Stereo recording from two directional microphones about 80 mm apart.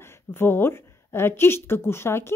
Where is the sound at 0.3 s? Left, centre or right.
Left.